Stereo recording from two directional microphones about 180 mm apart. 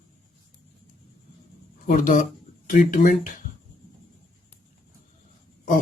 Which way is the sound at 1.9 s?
45° left (ahead or behind).